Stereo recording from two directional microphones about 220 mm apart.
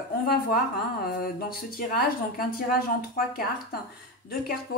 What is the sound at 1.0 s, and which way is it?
Speech, 40° left (ahead or behind).